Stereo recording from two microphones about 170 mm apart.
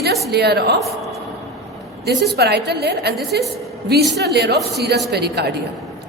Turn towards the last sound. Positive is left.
turn(degrees=-75)  # may be behind; listen again after turning